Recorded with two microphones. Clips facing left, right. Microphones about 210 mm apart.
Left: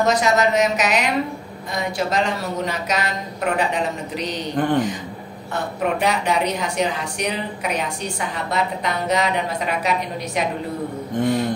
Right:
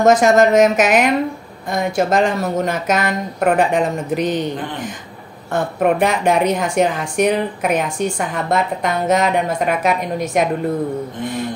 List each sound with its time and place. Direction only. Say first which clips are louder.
0.0 s a woman's voice: right 6 dB; 50° right (ahead or behind)
5.5 s a woman's voice: right 6 dB; 50° right (ahead or behind)